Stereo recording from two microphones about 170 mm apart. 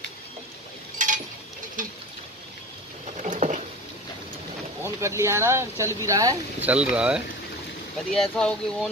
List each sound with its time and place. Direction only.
0.9 s chink: 50° right (ahead or behind)
3.2 s a sound: 45° right (ahead or behind)
4.8 s speech: 15° right (ahead or behind)
6.6 s speech: 5° right (ahead or behind)